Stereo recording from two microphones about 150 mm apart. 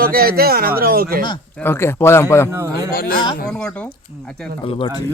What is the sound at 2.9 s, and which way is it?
Speech, 80° left.